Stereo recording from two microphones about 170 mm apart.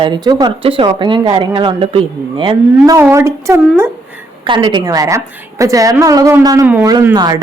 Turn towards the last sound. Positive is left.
turn(degrees=-20)  # may be behind; listen again after turning